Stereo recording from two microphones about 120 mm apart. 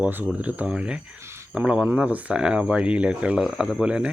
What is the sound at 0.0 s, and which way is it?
Speech, 15° right (ahead or behind).